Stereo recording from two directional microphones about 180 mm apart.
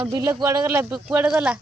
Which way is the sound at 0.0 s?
15° right (ahead or behind).